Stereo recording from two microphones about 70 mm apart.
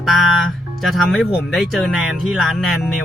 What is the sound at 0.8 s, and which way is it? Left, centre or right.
Speech, centre.